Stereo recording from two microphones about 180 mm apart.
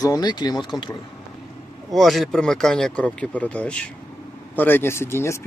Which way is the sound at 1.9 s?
Centre (ahead or behind).